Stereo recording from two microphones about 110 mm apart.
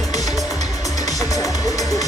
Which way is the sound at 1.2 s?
30° left (ahead or behind).